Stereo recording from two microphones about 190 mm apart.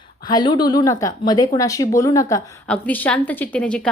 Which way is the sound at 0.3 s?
20° left (ahead or behind).